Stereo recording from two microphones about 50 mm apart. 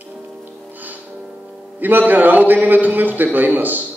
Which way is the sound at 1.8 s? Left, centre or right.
Right.